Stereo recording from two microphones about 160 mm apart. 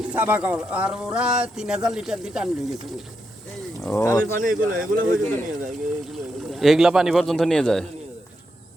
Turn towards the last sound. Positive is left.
turn(degrees=5)  # may be behind; listen again after turning